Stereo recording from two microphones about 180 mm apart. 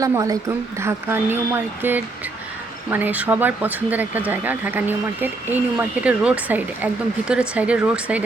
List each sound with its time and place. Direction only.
0.0 s speech: 20° right (ahead or behind)